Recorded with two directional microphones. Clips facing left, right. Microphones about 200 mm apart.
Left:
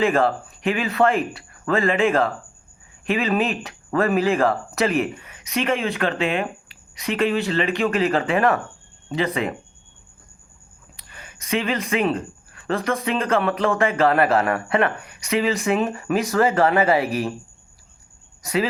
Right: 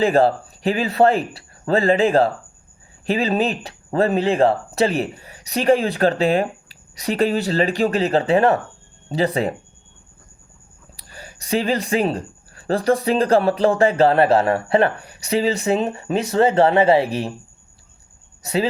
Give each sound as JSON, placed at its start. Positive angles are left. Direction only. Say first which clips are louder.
{"t": 0.0, "sound": "speech", "louder": "right 3 dB", "side_deg": -35}
{"t": 10.9, "sound": "speech", "louder": "right 5 dB", "side_deg": -35}
{"t": 18.4, "sound": "speech", "louder": "right 2 dB", "side_deg": -30}